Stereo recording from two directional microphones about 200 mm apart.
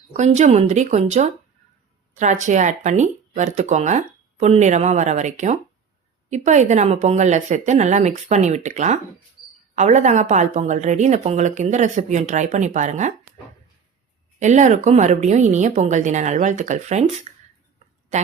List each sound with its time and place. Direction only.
0.1 s a woman's voice: 35° right (ahead or behind)
14.3 s a woman's voice: 35° right (ahead or behind)
18.1 s a sound: 35° right (ahead or behind)